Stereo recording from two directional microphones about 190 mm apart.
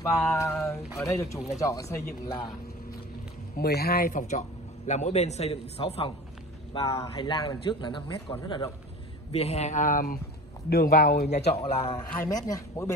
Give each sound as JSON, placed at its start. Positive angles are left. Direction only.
{"t": 0.3, "sound": "speech", "side_deg": 10}
{"t": 3.5, "sound": "a man's voice", "side_deg": 55}
{"t": 6.7, "sound": "a man's voice", "side_deg": 20}
{"t": 9.3, "sound": "a man's voice", "side_deg": 35}
{"t": 12.2, "sound": "speech", "side_deg": 20}